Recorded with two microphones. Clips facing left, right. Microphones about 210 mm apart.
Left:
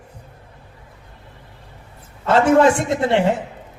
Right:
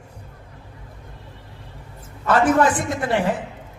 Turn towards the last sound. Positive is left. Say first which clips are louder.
# left 4 dB
turn(degrees=25)  # may be behind; listen again after turning